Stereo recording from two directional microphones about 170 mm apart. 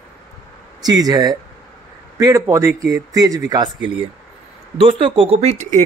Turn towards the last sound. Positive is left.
turn(degrees=-40)  # may be behind; listen again after turning